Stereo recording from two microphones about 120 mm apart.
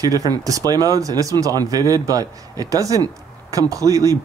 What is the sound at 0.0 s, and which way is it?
Speech, 30° right (ahead or behind).